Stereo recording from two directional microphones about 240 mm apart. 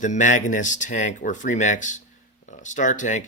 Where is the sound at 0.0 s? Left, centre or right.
Left.